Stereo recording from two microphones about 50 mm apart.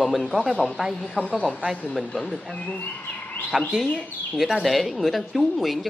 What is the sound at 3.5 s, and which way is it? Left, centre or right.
A man's voice, centre.